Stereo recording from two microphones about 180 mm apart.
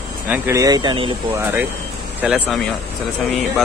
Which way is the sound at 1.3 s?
10° right (ahead or behind).